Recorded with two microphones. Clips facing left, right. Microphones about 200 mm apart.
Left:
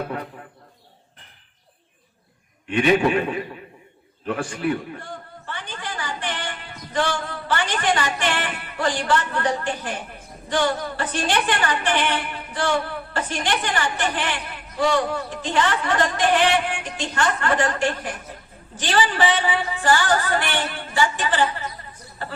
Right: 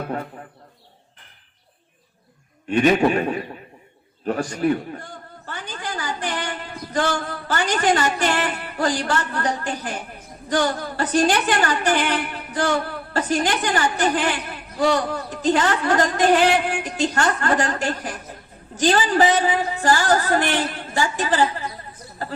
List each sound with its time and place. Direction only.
0.1 s a man's voice: 40° right (ahead or behind)
2.6 s a woman's voice: 40° right (ahead or behind)
5.5 s a sound: 40° right (ahead or behind)
10.5 s a woman's voice: 40° right (ahead or behind)